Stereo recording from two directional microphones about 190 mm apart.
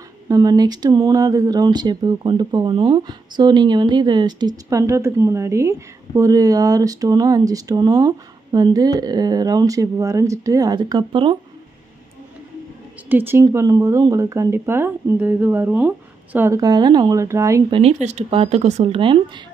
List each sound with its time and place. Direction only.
0.3 s speech: 20° right (ahead or behind)
13.1 s speech: 10° right (ahead or behind)
18.0 s speech: 35° right (ahead or behind)